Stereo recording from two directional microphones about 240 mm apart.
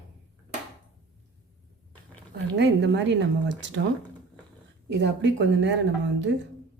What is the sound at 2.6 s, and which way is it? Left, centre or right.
Speech, right.